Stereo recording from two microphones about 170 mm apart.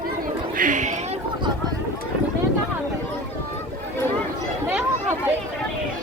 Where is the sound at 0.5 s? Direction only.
50° right (ahead or behind).